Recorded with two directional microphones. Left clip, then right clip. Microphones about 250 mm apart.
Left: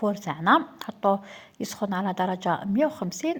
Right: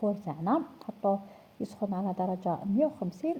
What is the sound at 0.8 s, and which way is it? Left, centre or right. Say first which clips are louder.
Speech: left 6 dB; left.